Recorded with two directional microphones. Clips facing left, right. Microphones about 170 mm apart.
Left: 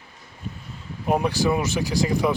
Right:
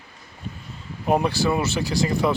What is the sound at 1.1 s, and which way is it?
A man's voice, 10° left (ahead or behind).